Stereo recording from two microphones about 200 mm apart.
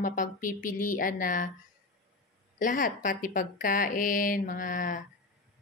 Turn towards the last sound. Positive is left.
turn(degrees=40)  # may be behind; listen again after turning